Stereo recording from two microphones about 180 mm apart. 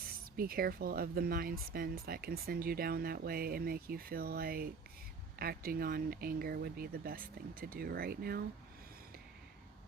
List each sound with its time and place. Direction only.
0.0 s speech: 55° right (ahead or behind)